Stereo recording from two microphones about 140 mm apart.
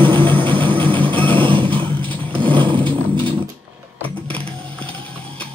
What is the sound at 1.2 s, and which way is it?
Music, 35° right (ahead or behind).